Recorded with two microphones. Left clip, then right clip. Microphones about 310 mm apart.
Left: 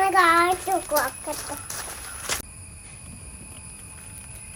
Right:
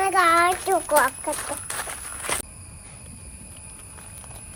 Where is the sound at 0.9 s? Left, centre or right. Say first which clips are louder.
Right 5 dB; right.